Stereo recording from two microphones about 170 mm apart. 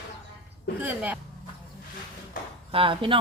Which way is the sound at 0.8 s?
10° right (ahead or behind).